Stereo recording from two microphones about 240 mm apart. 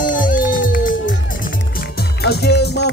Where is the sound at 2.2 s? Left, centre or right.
Left.